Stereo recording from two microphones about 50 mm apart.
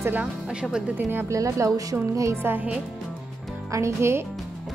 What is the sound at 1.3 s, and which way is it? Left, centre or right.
Speech, right.